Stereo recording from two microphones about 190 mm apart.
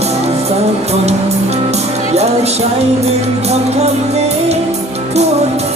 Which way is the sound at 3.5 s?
35° right (ahead or behind).